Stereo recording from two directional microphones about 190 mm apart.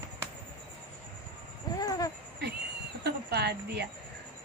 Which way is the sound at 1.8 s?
20° left (ahead or behind).